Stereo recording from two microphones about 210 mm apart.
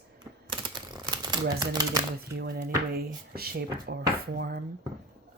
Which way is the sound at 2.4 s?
50° right (ahead or behind).